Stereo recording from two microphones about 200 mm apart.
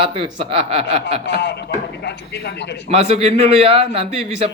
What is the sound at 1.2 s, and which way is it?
A man's voice, 60° left (ahead or behind).